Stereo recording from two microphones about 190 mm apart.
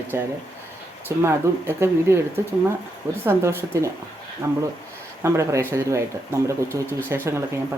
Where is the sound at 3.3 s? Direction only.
10° right (ahead or behind).